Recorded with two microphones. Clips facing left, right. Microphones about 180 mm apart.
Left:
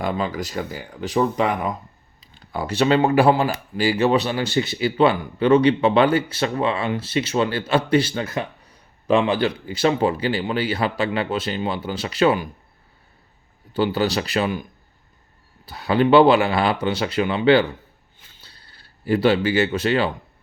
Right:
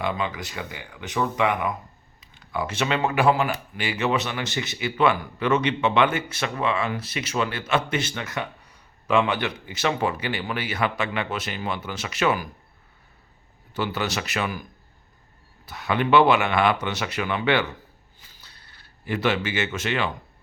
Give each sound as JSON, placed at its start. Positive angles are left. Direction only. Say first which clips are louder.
{"t": 0.0, "sound": "speech", "louder": "left 3 dB", "side_deg": 35}
{"t": 13.7, "sound": "speech", "louder": "left 7 dB", "side_deg": 30}
{"t": 18.3, "sound": "a sound", "louder": "left 3 dB", "side_deg": 30}